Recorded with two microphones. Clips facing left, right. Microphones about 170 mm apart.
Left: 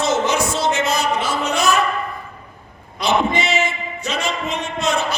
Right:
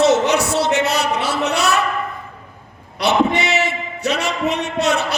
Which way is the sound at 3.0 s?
70° right (ahead or behind).